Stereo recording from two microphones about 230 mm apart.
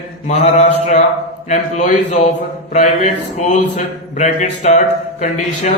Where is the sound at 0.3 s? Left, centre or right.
Left.